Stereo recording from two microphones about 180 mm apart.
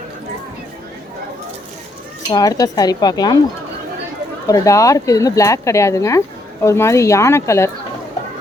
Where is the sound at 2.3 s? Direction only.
20° left (ahead or behind).